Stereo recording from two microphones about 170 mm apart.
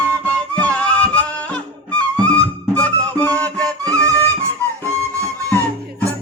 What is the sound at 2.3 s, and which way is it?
Music, 10° left (ahead or behind).